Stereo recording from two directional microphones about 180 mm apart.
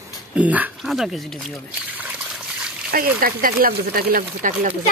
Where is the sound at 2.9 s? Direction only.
55° right (ahead or behind).